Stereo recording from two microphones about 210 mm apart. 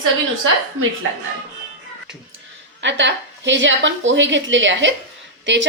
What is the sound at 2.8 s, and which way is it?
A woman's voice, 60° right (ahead or behind).